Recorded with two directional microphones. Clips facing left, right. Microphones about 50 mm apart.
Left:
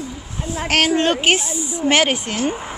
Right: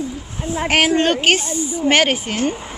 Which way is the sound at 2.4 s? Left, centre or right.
Centre.